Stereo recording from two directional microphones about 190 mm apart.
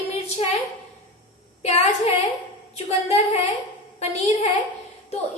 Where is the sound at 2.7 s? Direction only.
35° left (ahead or behind).